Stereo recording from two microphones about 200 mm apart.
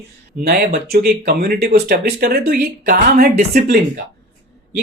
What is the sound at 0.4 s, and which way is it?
Speech, 50° right (ahead or behind).